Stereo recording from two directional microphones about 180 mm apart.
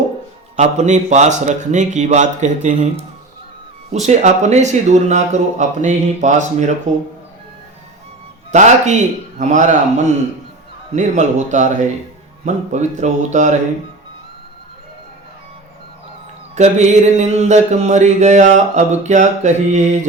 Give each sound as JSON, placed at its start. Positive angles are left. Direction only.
{"t": 0.5, "sound": "mantra", "side_deg": -40}
{"t": 8.5, "sound": "mantra", "side_deg": -40}
{"t": 16.6, "sound": "mantra", "side_deg": -40}